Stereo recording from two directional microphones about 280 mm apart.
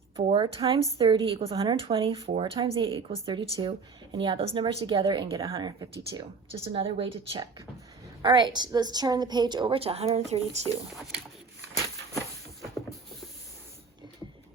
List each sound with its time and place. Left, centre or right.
0.2 s a woman's voice: centre